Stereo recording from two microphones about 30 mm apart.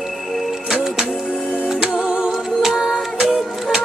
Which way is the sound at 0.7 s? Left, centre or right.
Centre.